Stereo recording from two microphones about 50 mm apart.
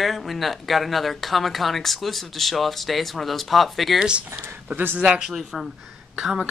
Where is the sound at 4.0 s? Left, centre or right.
Centre.